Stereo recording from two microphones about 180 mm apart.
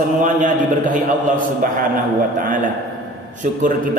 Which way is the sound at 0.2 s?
45° right (ahead or behind).